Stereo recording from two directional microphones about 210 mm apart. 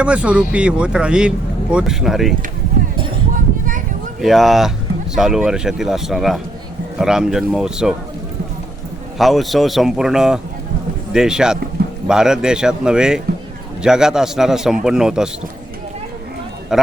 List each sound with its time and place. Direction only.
0.0 s a man's voice: 5° right (ahead or behind)
3.3 s a sound: 40° right (ahead or behind)
4.2 s a man's voice: centre (ahead or behind)
9.1 s a man's voice: centre (ahead or behind)
16.7 s a man's voice: centre (ahead or behind)